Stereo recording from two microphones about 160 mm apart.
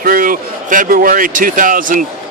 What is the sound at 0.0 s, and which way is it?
A man's voice, 60° right (ahead or behind).